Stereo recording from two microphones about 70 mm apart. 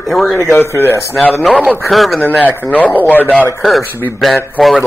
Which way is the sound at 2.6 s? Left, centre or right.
Left.